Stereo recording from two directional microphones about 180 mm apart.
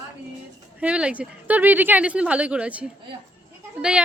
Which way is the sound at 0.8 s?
5° right (ahead or behind).